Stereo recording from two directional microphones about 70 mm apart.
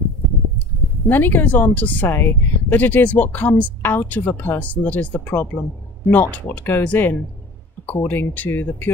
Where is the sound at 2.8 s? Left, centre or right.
Left.